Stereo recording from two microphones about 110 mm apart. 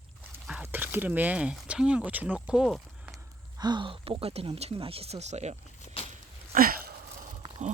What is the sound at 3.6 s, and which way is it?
Speech, 40° right (ahead or behind).